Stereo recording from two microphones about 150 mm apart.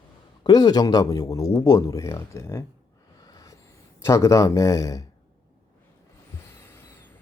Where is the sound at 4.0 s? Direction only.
20° left (ahead or behind).